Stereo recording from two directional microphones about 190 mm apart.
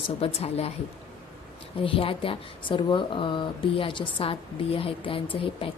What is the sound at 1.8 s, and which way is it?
Speech, 30° left (ahead or behind).